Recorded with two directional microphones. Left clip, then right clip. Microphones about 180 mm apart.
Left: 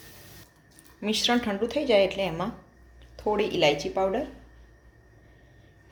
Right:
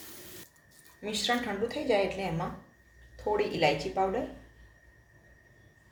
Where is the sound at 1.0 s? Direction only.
50° left (ahead or behind).